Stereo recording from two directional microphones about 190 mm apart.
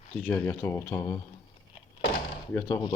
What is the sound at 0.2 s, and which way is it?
Speech, 10° left (ahead or behind).